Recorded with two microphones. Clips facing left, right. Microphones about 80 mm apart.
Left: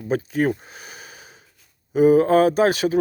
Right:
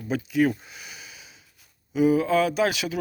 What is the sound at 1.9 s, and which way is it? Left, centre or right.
Speech, left.